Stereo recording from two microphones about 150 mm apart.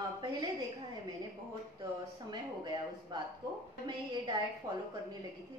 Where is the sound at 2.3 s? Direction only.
30° right (ahead or behind).